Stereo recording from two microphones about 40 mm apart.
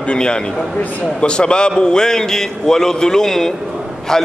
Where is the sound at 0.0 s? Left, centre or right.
Left.